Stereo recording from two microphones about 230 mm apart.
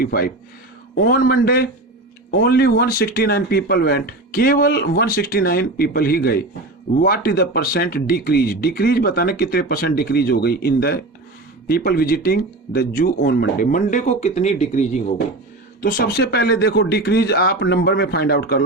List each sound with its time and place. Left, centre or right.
0.0 s speech: left
15.8 s speech: left